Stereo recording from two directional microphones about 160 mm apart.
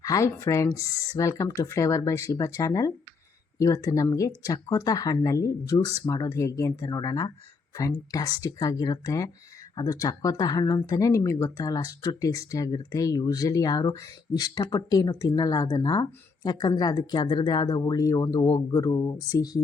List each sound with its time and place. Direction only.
0.0 s speech: 20° left (ahead or behind)